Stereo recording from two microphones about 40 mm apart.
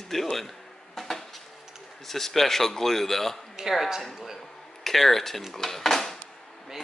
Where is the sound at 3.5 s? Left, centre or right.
Centre.